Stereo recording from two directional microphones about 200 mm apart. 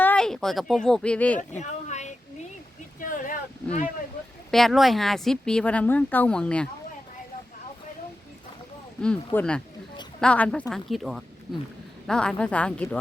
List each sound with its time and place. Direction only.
0.0 s speech: 5° left (ahead or behind)
1.4 s a woman's voice: 35° left (ahead or behind)
3.0 s a sound: 40° left (ahead or behind)
4.5 s speech: centre (ahead or behind)
9.0 s speech: 5° left (ahead or behind)